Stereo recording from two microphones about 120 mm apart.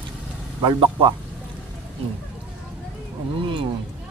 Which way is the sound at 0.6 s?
45° right (ahead or behind).